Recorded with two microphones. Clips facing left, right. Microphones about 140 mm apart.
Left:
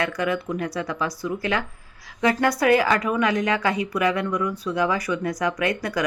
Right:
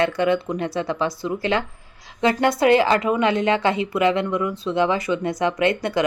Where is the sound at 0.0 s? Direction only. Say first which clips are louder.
Right 5 dB; 25° right (ahead or behind).